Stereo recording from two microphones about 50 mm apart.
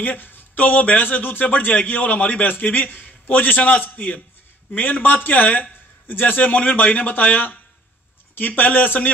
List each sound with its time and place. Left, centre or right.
0.0 s speech: left